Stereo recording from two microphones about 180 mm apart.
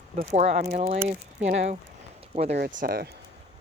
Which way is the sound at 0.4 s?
40° right (ahead or behind).